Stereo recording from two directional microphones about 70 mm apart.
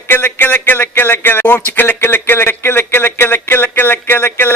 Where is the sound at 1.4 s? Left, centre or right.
Left.